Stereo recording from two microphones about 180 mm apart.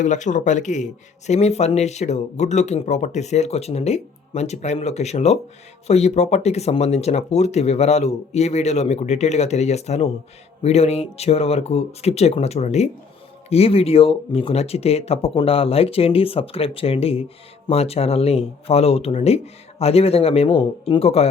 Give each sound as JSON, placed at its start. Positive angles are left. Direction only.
{"t": 0.0, "sound": "speech", "side_deg": 40}